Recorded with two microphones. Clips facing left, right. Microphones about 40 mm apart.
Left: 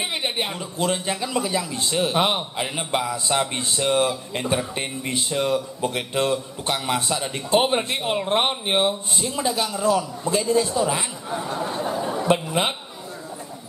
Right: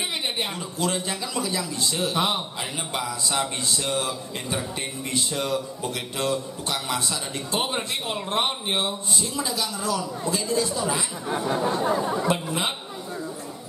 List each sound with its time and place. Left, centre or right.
0.2 s a man's voice: centre; by 4.6 s left
5.1 s speech: centre
5.8 s a man's voice: left
11.4 s a sound: right
12.3 s a man's voice: left